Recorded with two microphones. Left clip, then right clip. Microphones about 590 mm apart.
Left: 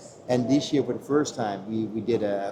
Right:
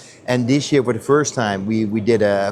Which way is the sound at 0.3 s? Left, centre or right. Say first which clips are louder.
Right 6 dB; right.